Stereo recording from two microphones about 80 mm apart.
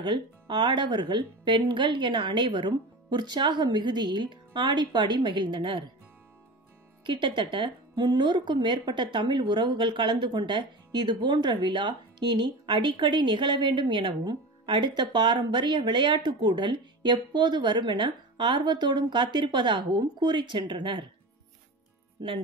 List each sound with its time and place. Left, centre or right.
0.0 s a woman's voice: right
7.1 s a woman's voice: right
22.2 s a woman's voice: right